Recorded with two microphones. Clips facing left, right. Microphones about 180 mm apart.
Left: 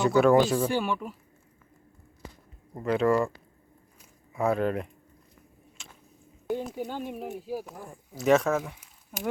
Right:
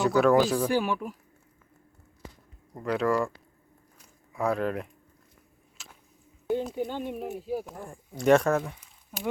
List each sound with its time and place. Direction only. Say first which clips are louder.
0.0 s speech: left 1 dB; centre (ahead or behind)
2.7 s speech: left 2 dB; centre (ahead or behind)
5.7 s a sound: right 1 dB; 5° right (ahead or behind)
6.5 s speech: right 3 dB; 5° left (ahead or behind)